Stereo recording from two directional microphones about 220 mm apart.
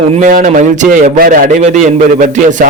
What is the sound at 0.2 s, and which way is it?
A man's voice, 35° right (ahead or behind).